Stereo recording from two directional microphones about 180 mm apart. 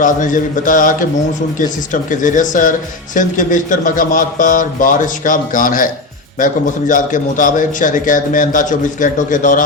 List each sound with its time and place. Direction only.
0.0 s a man's voice: 45° left (ahead or behind)